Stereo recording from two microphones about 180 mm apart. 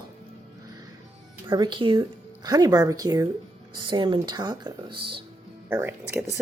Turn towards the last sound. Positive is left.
turn(degrees=-10)  # may be behind; listen again after turning